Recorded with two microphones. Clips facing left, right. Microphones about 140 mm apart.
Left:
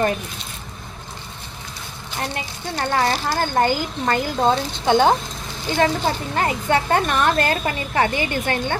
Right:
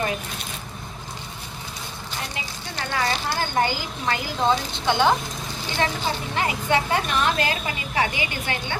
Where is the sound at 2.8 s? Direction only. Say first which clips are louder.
Left 5 dB; 45° left (ahead or behind).